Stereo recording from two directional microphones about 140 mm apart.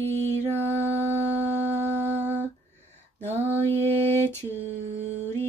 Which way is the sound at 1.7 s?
55° right (ahead or behind).